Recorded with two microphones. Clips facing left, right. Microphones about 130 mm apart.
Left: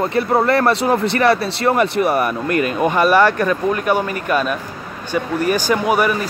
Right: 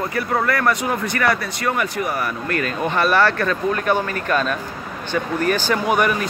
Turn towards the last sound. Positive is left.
turn(degrees=5)  # may be behind; listen again after turning